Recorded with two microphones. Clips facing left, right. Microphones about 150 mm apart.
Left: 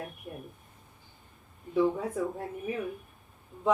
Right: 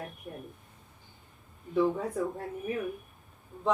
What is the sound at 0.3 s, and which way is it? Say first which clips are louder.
Speech: even; 5° left (ahead or behind).